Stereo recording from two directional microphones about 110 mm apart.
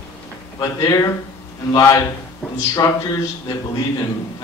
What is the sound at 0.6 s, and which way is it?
A man's voice, 35° left (ahead or behind).